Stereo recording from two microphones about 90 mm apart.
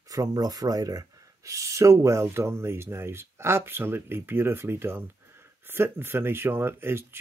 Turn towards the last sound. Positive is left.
turn(degrees=-25)  # may be behind; listen again after turning